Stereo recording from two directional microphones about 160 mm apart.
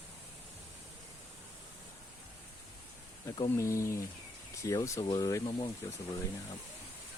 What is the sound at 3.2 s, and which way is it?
Speech, 20° left (ahead or behind).